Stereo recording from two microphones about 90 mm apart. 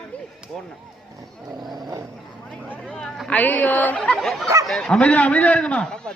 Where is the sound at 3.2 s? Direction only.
15° left (ahead or behind).